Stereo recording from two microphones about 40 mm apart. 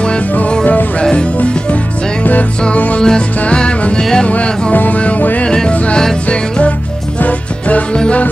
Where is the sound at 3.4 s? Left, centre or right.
Left.